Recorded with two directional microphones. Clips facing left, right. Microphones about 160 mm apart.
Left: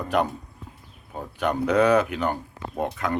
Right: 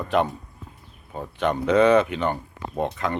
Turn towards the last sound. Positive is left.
turn(degrees=0)  # may be behind; listen again after turning